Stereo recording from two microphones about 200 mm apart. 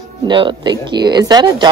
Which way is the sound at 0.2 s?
25° right (ahead or behind).